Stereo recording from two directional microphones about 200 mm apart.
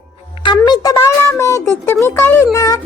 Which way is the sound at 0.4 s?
20° left (ahead or behind).